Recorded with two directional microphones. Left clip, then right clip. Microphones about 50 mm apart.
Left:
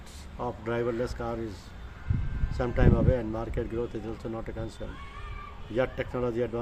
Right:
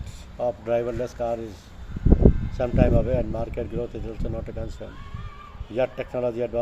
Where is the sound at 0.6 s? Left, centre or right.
Left.